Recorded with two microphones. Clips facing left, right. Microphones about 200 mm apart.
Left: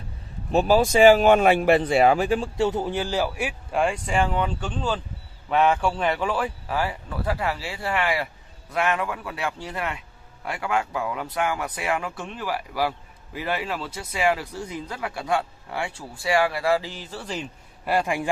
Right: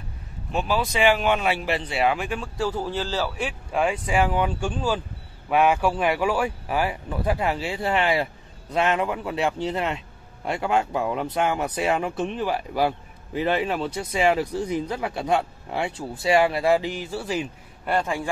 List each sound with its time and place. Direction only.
0.5 s speech: 40° left (ahead or behind); by 3.8 s 10° left (ahead or behind)
3.8 s a man's voice: 5° right (ahead or behind)
17.8 s speech: 10° left (ahead or behind)